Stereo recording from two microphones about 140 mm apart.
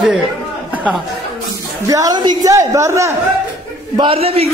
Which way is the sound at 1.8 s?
25° right (ahead or behind).